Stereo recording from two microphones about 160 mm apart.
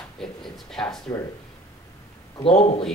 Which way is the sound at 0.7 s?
Centre (ahead or behind).